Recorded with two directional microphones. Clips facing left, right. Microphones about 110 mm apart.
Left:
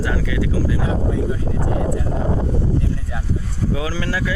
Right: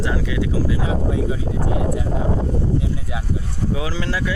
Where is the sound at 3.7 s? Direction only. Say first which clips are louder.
Left 1 dB; 20° right (ahead or behind).